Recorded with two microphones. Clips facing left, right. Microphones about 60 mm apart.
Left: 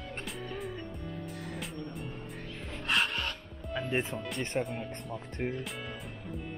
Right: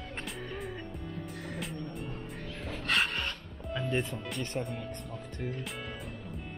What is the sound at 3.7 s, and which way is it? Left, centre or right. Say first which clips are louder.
Speech: even; centre.